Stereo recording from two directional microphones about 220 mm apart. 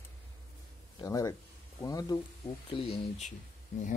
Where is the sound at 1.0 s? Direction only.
15° left (ahead or behind).